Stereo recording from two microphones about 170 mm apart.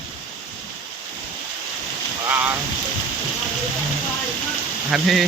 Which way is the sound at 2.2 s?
10° right (ahead or behind).